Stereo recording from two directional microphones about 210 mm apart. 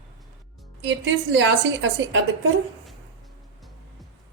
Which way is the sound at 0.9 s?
60° right (ahead or behind).